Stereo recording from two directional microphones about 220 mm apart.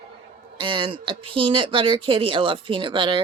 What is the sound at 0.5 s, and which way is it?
Speech, 20° right (ahead or behind).